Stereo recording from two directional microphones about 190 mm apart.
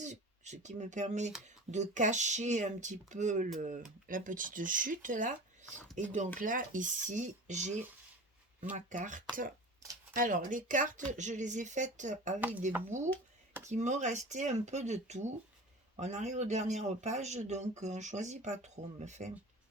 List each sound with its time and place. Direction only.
0.0 s speech: 40° right (ahead or behind)
8.9 s speech: 45° right (ahead or behind)
9.8 s a sound: 15° right (ahead or behind)
10.2 s speech: 45° right (ahead or behind)
12.4 s speech: 10° right (ahead or behind)
12.9 s speech: 40° right (ahead or behind)